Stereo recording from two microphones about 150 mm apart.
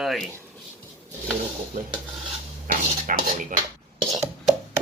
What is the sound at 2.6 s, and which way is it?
Speech, 65° right (ahead or behind).